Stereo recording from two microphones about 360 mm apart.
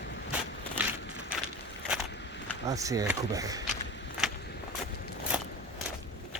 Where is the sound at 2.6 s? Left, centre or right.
Centre.